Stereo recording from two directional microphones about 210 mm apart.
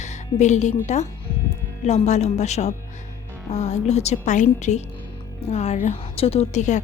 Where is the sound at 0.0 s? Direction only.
35° left (ahead or behind).